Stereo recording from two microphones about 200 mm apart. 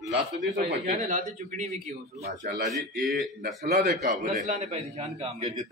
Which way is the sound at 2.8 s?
50° right (ahead or behind).